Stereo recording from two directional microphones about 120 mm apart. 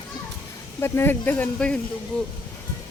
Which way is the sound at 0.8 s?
20° left (ahead or behind).